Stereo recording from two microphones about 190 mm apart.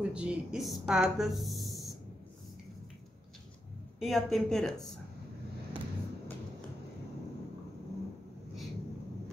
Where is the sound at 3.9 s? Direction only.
Centre (ahead or behind).